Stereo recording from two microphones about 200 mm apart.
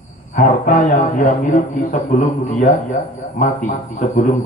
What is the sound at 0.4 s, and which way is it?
A man's voice, 45° left (ahead or behind).